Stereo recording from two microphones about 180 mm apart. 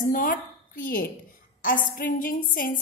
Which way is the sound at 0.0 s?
50° left (ahead or behind).